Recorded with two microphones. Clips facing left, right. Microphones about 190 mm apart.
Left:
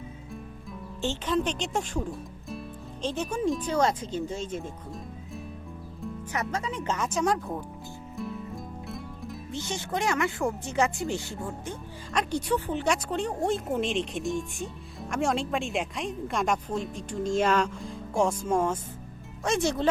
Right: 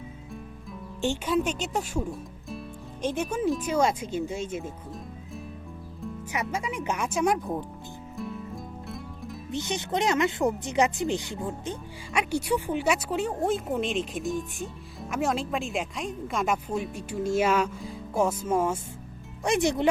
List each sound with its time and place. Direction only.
1.0 s speech: 10° right (ahead or behind)
6.3 s speech: 10° right (ahead or behind)
8.1 s music: centre (ahead or behind)
9.5 s speech: 20° right (ahead or behind)